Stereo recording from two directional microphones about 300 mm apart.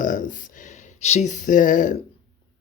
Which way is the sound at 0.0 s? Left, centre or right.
Left.